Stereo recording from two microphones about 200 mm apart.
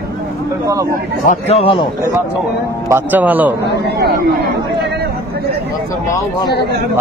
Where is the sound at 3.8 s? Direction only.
55° right (ahead or behind).